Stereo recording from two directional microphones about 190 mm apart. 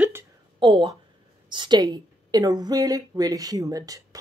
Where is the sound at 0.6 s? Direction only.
25° right (ahead or behind).